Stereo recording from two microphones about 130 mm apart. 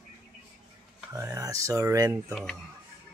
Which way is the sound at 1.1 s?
20° right (ahead or behind).